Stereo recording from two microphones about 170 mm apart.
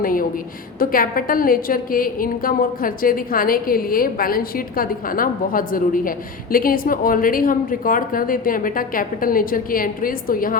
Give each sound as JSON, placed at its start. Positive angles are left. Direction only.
{"t": 0.0, "sound": "a woman's voice", "side_deg": 55}